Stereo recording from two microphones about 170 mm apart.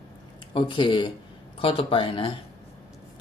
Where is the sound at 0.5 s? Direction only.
30° left (ahead or behind).